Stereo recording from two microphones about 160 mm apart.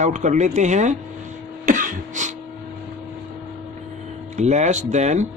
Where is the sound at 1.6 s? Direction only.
55° right (ahead or behind).